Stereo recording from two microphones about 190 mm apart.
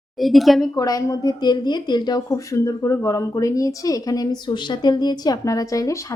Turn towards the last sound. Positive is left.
turn(degrees=15)  # may be behind; listen again after turning